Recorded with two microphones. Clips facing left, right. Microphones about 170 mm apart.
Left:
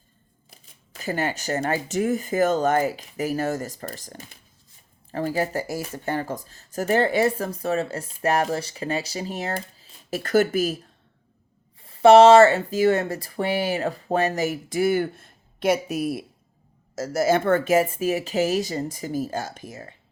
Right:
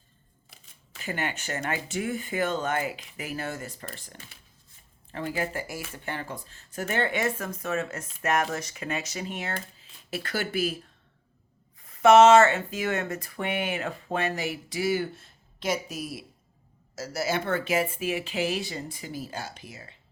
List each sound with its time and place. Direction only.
0.5 s speech: 40° left (ahead or behind)
11.8 s speech: 30° left (ahead or behind); by 16.2 s 60° left (ahead or behind)
16.9 s speech: 45° left (ahead or behind)